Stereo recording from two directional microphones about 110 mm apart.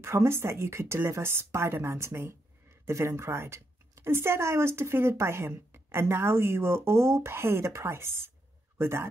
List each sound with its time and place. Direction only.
0.0 s a woman's voice: 25° right (ahead or behind)